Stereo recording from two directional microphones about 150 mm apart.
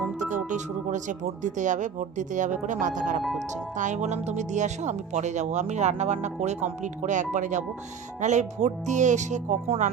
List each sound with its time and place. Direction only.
0.2 s speech: 55° right (ahead or behind)